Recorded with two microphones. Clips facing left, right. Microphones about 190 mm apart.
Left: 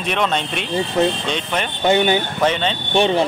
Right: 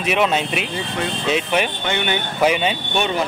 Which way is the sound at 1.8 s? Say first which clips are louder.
Left 7 dB; 35° left (ahead or behind).